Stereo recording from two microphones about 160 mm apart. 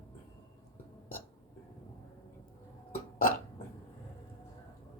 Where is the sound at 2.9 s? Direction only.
65° left (ahead or behind).